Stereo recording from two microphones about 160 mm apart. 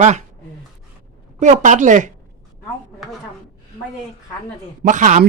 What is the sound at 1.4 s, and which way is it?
Speech, 50° right (ahead or behind).